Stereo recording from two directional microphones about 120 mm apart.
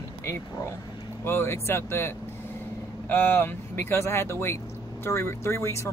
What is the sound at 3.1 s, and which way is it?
Speech, 15° left (ahead or behind).